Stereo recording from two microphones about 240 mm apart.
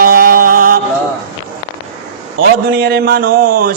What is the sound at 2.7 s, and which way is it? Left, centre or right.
Mantra, right.